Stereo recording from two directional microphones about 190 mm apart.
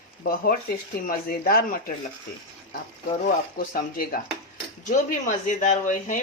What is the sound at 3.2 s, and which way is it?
Speech, 45° left (ahead or behind).